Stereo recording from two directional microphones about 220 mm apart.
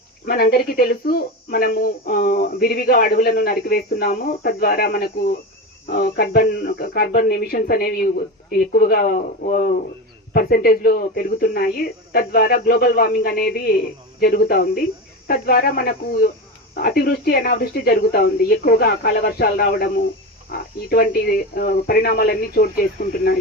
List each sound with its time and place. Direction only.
0.3 s speech: 45° left (ahead or behind)